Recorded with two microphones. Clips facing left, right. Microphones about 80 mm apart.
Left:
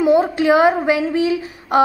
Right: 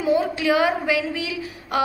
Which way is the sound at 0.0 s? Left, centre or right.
Left.